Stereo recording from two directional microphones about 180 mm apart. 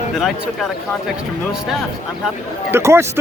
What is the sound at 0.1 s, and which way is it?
Speech, centre (ahead or behind).